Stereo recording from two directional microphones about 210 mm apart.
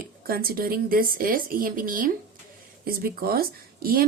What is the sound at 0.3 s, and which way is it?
Speech, 45° right (ahead or behind).